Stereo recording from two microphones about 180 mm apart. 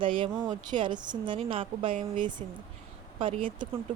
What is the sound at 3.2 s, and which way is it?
Speech, 30° right (ahead or behind).